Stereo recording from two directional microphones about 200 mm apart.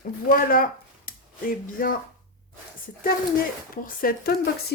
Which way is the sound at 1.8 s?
45° left (ahead or behind).